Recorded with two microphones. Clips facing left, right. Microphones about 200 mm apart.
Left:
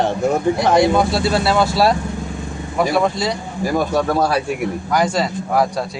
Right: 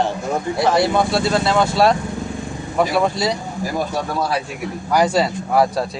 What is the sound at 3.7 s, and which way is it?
Speech, 65° left (ahead or behind).